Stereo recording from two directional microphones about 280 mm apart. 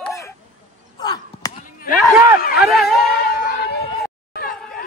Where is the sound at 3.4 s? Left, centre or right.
Left.